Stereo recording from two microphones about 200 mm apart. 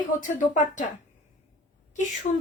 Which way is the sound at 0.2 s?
40° left (ahead or behind).